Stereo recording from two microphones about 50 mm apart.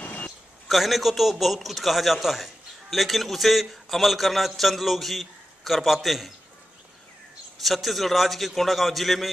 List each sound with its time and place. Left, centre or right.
0.0 s a sound: left
0.7 s a man's voice: centre
7.6 s a man's voice: centre